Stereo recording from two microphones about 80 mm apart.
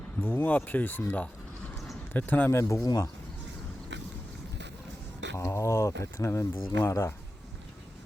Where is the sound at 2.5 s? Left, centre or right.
Left.